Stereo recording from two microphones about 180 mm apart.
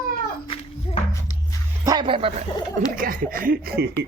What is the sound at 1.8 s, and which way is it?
Speech, 25° right (ahead or behind).